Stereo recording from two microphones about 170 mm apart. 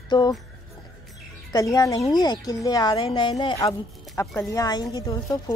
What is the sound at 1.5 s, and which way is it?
A woman's voice, 20° left (ahead or behind).